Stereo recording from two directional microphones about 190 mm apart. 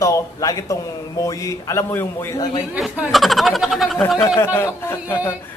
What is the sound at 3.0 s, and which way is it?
Speech, centre (ahead or behind).